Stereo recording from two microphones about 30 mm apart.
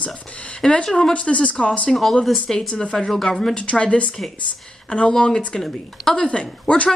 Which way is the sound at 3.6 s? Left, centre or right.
Left.